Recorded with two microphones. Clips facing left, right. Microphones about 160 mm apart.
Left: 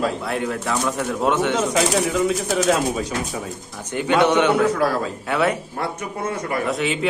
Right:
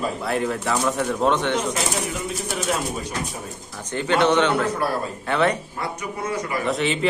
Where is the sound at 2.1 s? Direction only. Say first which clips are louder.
Left 8 dB; 90° left.